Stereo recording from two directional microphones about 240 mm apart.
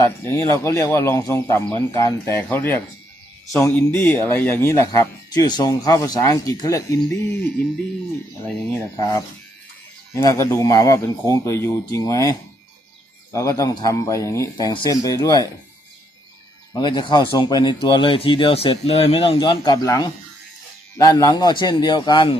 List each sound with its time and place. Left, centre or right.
0.0 s speech: centre
9.0 s speech: centre
16.7 s speech: centre